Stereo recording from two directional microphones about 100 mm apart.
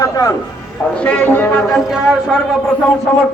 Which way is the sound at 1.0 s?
15° left (ahead or behind).